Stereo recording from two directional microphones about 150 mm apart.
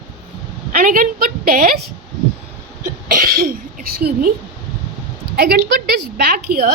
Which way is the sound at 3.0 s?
75° right (ahead or behind).